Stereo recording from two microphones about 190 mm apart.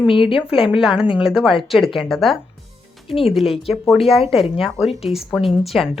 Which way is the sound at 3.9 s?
Centre (ahead or behind).